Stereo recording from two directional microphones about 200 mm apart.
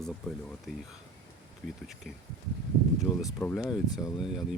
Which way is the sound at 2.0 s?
Centre (ahead or behind).